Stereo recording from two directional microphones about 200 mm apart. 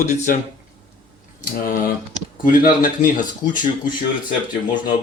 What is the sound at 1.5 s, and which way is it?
Speech, 45° left (ahead or behind).